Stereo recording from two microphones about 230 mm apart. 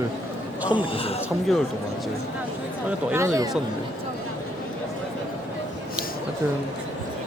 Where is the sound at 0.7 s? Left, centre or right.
Left.